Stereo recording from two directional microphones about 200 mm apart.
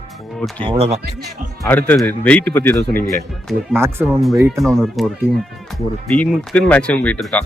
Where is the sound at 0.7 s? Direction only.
30° right (ahead or behind).